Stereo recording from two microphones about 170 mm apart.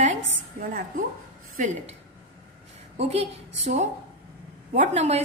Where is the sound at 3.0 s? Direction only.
40° right (ahead or behind).